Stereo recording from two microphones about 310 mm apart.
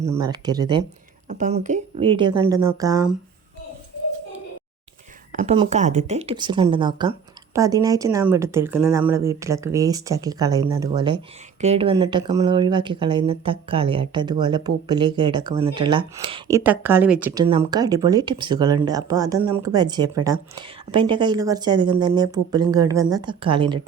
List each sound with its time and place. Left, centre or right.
0.0 s speech: centre
5.3 s speech: right